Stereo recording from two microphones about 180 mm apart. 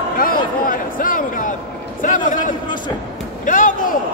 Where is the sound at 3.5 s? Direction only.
45° left (ahead or behind).